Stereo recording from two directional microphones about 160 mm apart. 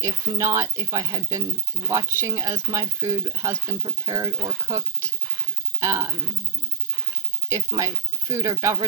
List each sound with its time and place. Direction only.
0.0 s speech: 20° right (ahead or behind)
7.5 s speech: 20° right (ahead or behind)